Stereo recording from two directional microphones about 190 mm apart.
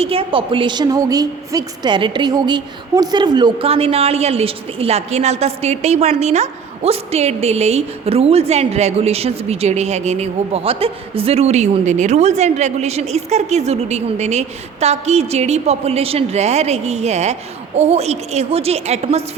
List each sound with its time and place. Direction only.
0.0 s a woman's voice: 30° right (ahead or behind)